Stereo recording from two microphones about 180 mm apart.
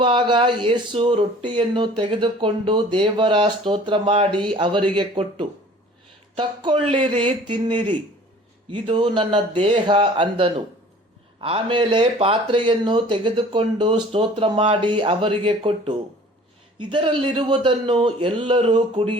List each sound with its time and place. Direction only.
0.0 s speech: 25° right (ahead or behind)